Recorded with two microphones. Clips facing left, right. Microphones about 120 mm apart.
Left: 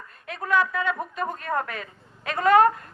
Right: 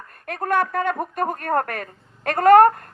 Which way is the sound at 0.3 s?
55° right (ahead or behind).